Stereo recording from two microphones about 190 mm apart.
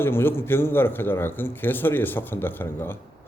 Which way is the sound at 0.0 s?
10° left (ahead or behind).